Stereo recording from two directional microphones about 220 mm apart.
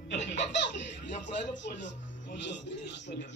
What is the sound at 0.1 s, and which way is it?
Speech, 55° left (ahead or behind).